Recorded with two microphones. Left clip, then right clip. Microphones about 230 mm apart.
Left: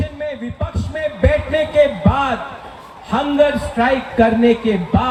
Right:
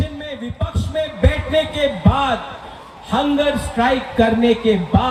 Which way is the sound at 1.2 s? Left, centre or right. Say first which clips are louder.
Left 5 dB; right.